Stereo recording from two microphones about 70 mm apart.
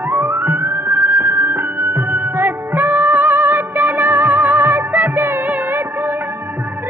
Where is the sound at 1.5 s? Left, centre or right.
Right.